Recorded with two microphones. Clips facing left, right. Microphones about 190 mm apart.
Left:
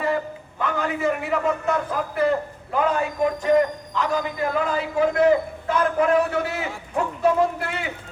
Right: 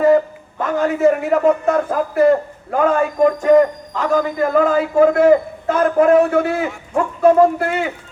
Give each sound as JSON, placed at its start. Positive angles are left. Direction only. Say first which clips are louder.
{"t": 0.6, "sound": "a man's voice", "louder": "right 9 dB", "side_deg": -45}